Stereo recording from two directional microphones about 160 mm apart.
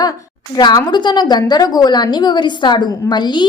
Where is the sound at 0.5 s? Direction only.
25° left (ahead or behind).